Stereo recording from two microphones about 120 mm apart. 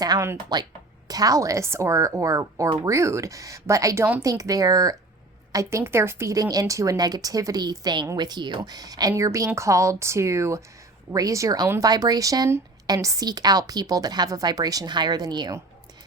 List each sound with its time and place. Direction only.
0.0 s speech: 35° right (ahead or behind)